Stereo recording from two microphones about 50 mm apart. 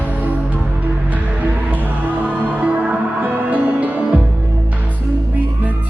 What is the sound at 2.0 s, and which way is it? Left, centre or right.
Music, right.